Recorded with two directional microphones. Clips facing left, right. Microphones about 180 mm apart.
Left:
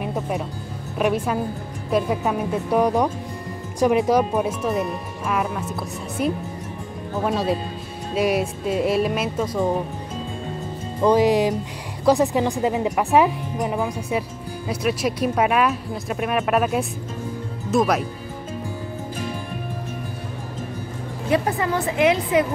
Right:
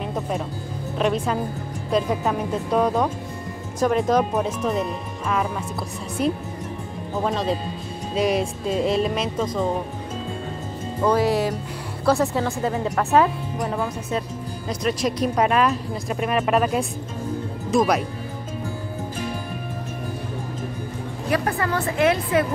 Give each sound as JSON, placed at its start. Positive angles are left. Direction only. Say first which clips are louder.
{"t": 0.0, "sound": "music", "louder": "left 1 dB", "side_deg": 10}
{"t": 0.9, "sound": "speech", "louder": "left 1 dB", "side_deg": 10}
{"t": 7.2, "sound": "speech", "louder": "left 1 dB", "side_deg": 5}
{"t": 11.0, "sound": "speech", "louder": "left 3 dB", "side_deg": 15}
{"t": 21.3, "sound": "speech", "louder": "left 2 dB", "side_deg": 20}